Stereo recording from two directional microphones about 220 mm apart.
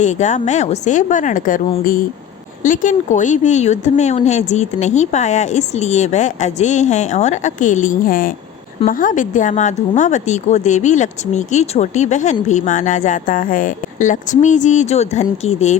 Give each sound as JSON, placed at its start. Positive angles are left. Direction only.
{"t": 0.0, "sound": "a woman's voice", "side_deg": 35}